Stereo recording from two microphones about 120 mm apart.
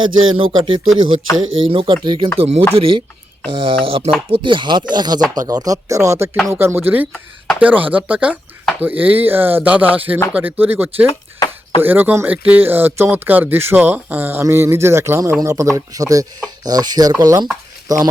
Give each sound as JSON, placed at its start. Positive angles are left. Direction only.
{"t": 0.0, "sound": "speech", "side_deg": -45}
{"t": 11.3, "sound": "a sound", "side_deg": 35}
{"t": 11.8, "sound": "speech", "side_deg": -15}